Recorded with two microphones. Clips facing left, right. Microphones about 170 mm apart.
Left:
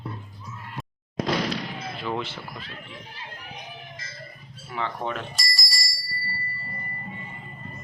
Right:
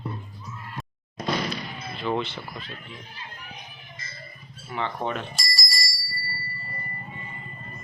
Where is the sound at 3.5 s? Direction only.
90° left.